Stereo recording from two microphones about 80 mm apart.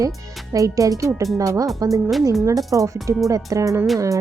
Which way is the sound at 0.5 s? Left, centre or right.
Right.